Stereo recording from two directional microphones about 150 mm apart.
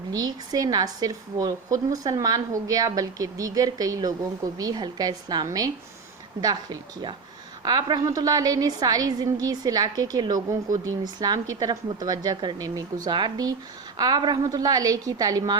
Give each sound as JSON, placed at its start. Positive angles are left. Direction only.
{"t": 0.1, "sound": "a woman's voice", "side_deg": -25}